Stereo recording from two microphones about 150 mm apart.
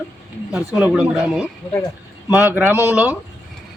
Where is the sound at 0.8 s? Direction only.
5° right (ahead or behind).